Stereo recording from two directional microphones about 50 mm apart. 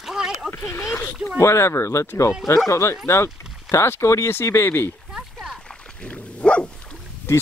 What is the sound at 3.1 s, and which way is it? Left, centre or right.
Speech, left.